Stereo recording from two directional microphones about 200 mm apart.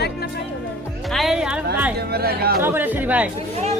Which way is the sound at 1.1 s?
Centre (ahead or behind).